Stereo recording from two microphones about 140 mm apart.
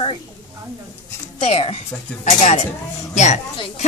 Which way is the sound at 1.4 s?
45° left (ahead or behind).